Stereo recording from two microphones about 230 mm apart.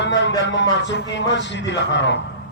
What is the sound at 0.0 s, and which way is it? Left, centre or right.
Speech, left.